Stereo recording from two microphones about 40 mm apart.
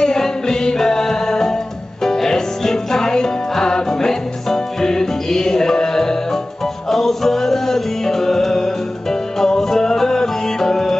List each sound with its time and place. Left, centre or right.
0.0 s music: centre